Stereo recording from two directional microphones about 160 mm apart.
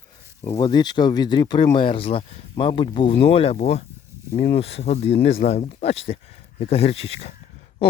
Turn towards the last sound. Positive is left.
turn(degrees=40)  # may be behind; listen again after turning